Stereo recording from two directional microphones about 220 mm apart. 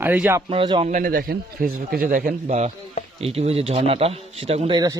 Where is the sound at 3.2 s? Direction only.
25° right (ahead or behind).